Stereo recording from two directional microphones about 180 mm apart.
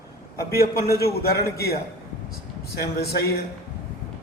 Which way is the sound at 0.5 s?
60° left (ahead or behind).